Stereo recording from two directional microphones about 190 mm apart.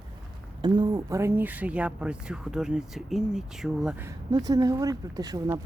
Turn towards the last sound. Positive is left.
turn(degrees=-20)  # may be behind; listen again after turning